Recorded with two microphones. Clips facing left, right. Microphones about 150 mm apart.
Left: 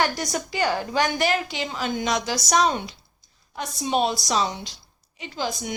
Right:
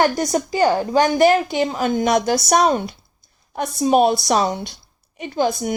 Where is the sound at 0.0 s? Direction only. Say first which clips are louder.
Right 7 dB; 45° right (ahead or behind).